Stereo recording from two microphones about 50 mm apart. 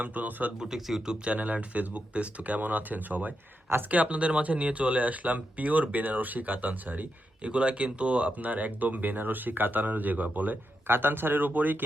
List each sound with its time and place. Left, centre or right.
0.0 s speech: right
0.9 s speech: centre
1.2 s speech: right
7.4 s speech: right
10.8 s speech: right